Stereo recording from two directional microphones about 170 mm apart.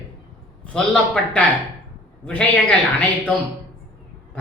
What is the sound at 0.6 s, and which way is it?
A man's voice, 5° left (ahead or behind).